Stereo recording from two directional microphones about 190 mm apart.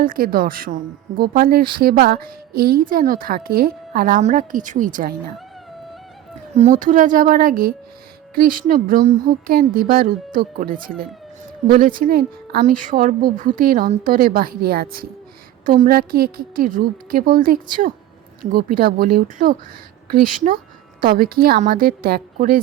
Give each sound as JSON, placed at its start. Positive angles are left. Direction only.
{"t": 0.0, "sound": "a woman's voice", "side_deg": -50}
{"t": 6.5, "sound": "a woman's voice", "side_deg": -35}